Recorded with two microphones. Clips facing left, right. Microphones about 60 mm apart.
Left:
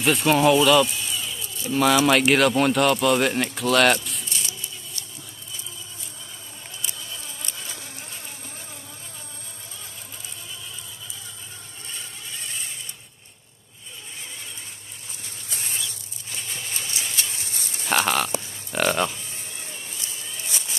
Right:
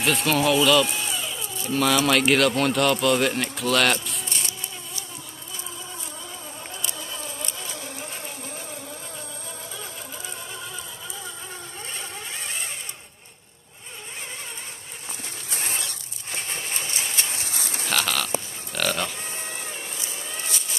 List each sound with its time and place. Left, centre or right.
0.0 s speech: centre
15.5 s typewriter: right
17.5 s a sound: right
17.8 s a sound: centre
18.7 s livestock: centre
19.2 s sheep: right